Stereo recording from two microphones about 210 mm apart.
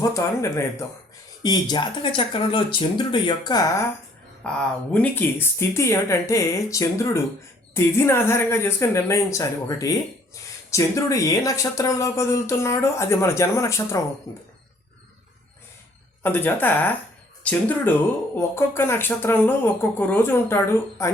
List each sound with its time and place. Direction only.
0.0 s speech: 15° left (ahead or behind)
4.4 s speech: 5° left (ahead or behind)
16.2 s speech: 10° left (ahead or behind)